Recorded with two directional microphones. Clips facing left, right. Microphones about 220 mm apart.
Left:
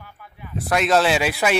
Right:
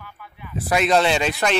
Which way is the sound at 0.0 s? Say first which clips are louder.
Right 1 dB; 40° left (ahead or behind).